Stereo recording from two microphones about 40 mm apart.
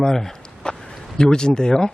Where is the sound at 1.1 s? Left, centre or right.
Centre.